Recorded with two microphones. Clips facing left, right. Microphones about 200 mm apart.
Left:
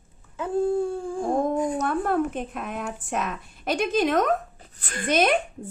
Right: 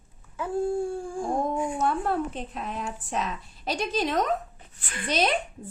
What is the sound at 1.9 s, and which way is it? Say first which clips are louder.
A woman's voice: left 3 dB; 55° left (ahead or behind).